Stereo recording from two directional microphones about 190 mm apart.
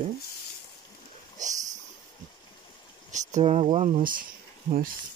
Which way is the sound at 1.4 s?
40° right (ahead or behind).